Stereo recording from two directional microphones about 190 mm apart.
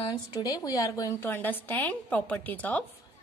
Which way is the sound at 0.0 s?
25° left (ahead or behind).